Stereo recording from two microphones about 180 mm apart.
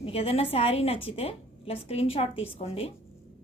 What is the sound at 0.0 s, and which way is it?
A woman's voice, 35° left (ahead or behind).